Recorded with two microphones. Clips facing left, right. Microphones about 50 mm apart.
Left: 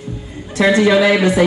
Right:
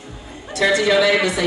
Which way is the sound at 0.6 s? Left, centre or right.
Left.